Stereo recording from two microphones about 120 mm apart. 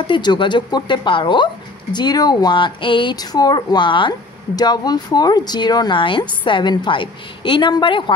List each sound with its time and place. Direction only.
0.0 s speech: 40° left (ahead or behind)